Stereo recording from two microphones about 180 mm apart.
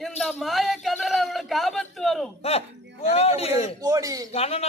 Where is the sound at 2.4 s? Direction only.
35° left (ahead or behind).